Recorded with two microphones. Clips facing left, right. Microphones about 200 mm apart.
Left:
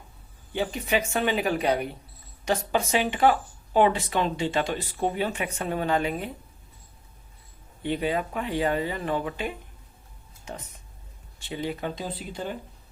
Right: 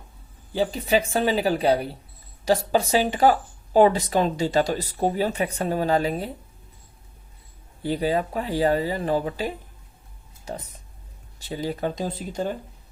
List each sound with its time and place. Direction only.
0.5 s speech: 35° right (ahead or behind)
7.8 s speech: 35° right (ahead or behind)